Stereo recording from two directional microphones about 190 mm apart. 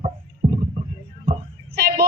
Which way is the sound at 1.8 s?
55° right (ahead or behind).